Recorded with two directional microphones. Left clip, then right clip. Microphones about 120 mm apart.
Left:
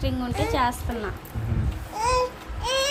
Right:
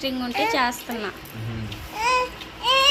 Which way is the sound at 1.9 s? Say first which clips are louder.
Right 2 dB; 35° left (ahead or behind).